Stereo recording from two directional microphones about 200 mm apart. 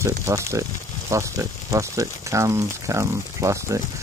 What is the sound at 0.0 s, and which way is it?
Speech, 15° right (ahead or behind).